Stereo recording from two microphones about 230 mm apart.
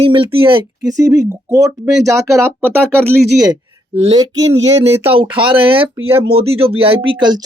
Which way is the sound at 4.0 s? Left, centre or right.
Right.